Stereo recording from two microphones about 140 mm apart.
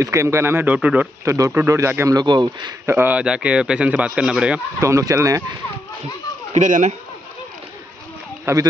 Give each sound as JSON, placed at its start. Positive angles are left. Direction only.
{"t": 0.0, "sound": "a man's voice", "side_deg": -20}
{"t": 2.9, "sound": "speech", "side_deg": -15}
{"t": 4.7, "sound": "a man's voice", "side_deg": -20}
{"t": 6.5, "sound": "speech", "side_deg": -60}
{"t": 8.5, "sound": "a man's voice", "side_deg": -20}